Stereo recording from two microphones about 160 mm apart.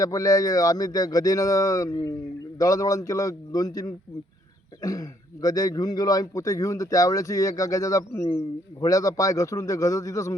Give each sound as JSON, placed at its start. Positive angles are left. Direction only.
{"t": 0.0, "sound": "a man's voice", "side_deg": 20}